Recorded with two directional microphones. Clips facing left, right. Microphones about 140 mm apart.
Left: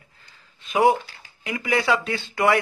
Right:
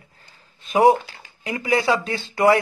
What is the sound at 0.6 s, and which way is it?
Speech, 35° right (ahead or behind).